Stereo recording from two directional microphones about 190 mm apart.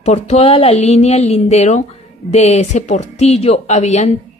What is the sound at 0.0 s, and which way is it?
A woman's voice, 35° left (ahead or behind).